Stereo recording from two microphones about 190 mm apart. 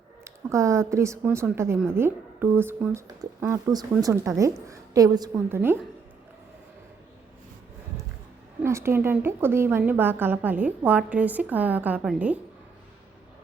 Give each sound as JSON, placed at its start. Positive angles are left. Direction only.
{"t": 0.3, "sound": "a woman's voice", "side_deg": -15}
{"t": 8.6, "sound": "a woman's voice", "side_deg": -15}